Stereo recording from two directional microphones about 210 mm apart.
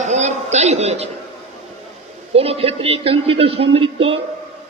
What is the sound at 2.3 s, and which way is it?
A man's voice, 30° right (ahead or behind).